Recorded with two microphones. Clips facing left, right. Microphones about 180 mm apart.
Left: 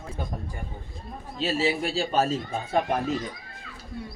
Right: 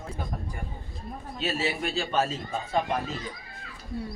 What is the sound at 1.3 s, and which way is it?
Speech, 30° left (ahead or behind).